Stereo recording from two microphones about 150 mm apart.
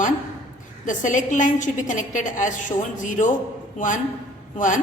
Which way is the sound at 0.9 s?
60° left (ahead or behind).